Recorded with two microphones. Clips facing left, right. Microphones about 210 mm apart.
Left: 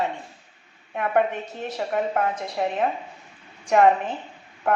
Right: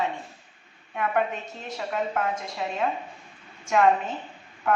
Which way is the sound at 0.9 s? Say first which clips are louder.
Left 4 dB; 45° left (ahead or behind).